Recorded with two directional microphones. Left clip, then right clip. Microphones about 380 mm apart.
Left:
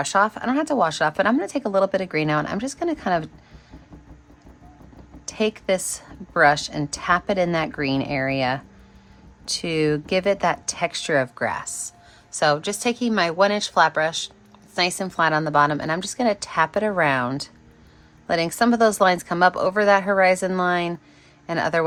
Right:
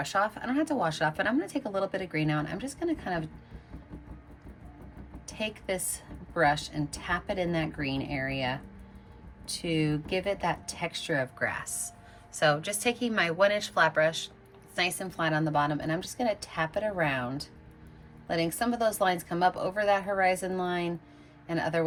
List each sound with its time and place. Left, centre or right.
0.0 s speech: centre
5.3 s a woman's voice: centre